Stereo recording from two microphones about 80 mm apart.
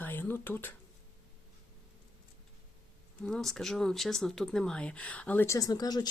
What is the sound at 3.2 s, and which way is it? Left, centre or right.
Speech, centre.